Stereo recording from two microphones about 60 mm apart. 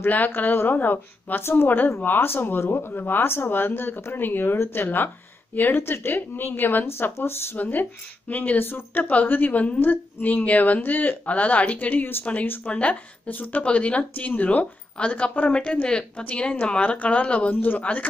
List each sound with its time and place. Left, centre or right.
0.0 s speech: left
7.5 s speech: left